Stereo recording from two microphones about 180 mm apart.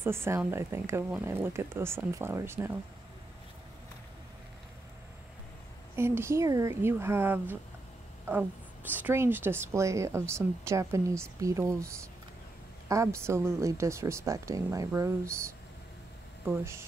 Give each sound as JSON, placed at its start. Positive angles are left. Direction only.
{"t": 0.0, "sound": "a woman's voice", "side_deg": -15}
{"t": 5.9, "sound": "a woman's voice", "side_deg": -15}
{"t": 8.9, "sound": "a woman's voice", "side_deg": -10}